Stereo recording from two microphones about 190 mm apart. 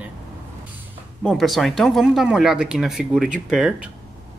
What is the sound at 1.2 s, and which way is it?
Speech, centre (ahead or behind).